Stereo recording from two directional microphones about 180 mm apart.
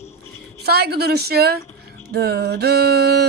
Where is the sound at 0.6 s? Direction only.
65° right (ahead or behind).